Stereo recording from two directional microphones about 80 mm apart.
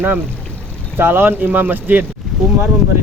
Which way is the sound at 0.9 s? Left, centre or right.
Right.